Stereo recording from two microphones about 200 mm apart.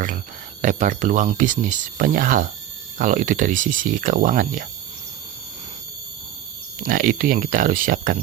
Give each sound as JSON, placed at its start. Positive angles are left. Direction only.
{"t": 0.6, "sound": "speech", "side_deg": -40}
{"t": 6.8, "sound": "speech", "side_deg": -45}